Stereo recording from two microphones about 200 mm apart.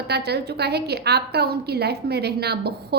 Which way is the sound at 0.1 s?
55° right (ahead or behind).